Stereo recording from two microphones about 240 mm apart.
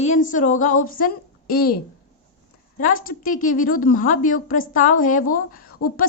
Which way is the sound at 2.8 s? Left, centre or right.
Left.